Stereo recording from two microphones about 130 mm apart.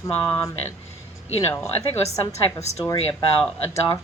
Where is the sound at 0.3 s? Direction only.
30° left (ahead or behind).